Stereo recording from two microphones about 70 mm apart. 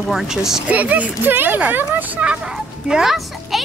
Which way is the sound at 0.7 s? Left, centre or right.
Right.